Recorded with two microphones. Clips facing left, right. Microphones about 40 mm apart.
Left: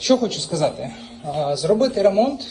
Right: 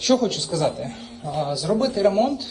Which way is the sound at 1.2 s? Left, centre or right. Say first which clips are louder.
Left 2 dB; centre.